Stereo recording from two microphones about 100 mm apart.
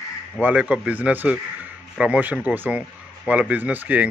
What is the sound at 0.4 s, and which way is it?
Speech, 15° right (ahead or behind).